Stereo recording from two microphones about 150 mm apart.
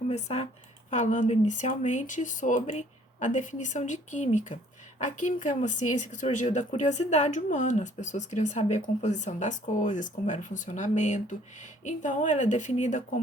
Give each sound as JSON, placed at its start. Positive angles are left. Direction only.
{"t": 0.1, "sound": "speech", "side_deg": 45}